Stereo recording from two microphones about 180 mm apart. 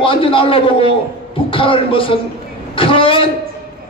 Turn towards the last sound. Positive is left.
turn(degrees=30)  # may be behind; listen again after turning